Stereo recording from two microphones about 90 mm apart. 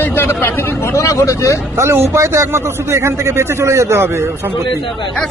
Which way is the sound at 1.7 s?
30° right (ahead or behind).